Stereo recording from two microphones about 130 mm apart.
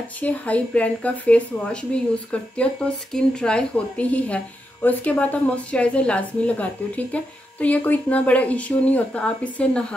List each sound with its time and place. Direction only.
0.2 s a woman's voice: 10° left (ahead or behind)